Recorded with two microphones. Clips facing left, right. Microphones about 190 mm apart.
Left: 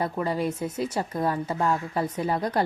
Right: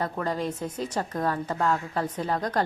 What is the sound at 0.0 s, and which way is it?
A woman's voice, 10° left (ahead or behind).